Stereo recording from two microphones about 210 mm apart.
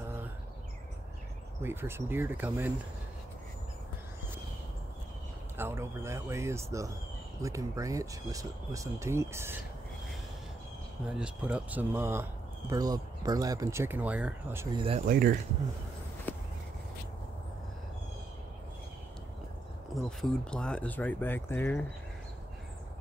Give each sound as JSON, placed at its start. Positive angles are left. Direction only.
{"t": 1.6, "sound": "speech", "side_deg": -10}
{"t": 5.6, "sound": "speech", "side_deg": -10}
{"t": 11.1, "sound": "speech", "side_deg": -5}
{"t": 14.8, "sound": "speech", "side_deg": -25}
{"t": 15.0, "sound": "speech", "side_deg": -40}
{"t": 16.3, "sound": "a sound", "side_deg": 10}
{"t": 20.0, "sound": "speech", "side_deg": 0}